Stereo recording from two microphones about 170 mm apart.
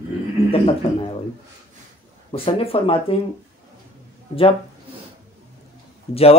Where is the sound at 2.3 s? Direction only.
35° left (ahead or behind).